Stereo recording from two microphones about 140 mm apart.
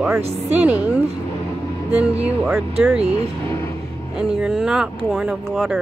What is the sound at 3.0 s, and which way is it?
Speech, 45° right (ahead or behind).